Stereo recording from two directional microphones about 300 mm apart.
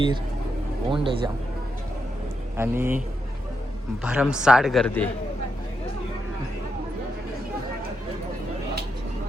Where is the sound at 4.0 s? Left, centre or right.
Centre.